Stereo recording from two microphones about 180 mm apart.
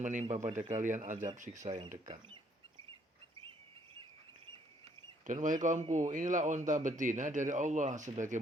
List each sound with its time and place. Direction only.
0.0 s a man's voice: 45° right (ahead or behind)
1.6 s speech: 20° right (ahead or behind)
5.2 s a man's voice: 45° right (ahead or behind)